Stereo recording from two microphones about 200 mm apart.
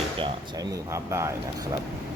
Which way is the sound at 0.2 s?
20° right (ahead or behind).